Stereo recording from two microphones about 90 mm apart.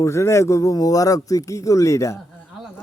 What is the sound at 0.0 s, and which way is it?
Speech, 30° left (ahead or behind).